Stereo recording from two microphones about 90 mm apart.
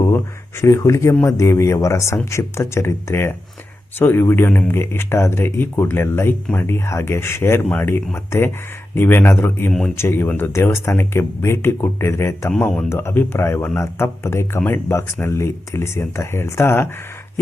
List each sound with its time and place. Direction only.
0.6 s speech: 35° left (ahead or behind)
12.5 s speech: 10° left (ahead or behind)
12.9 s speech: 30° left (ahead or behind)